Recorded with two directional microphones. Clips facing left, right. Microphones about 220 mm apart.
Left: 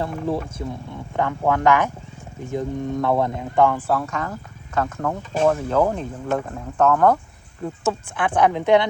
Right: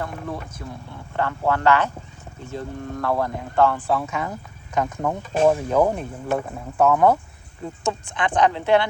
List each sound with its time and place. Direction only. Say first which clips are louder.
0.0 s speech: left 6 dB; 25° left (ahead or behind)
1.1 s speech: left 2 dB; 15° left (ahead or behind)
4.0 s speech: even; 10° right (ahead or behind)
7.6 s speech: left 3 dB; 5° left (ahead or behind)